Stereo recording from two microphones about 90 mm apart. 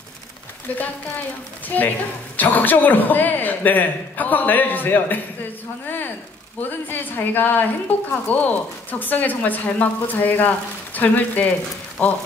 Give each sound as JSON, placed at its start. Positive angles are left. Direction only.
{"t": 0.7, "sound": "a man's voice", "side_deg": 20}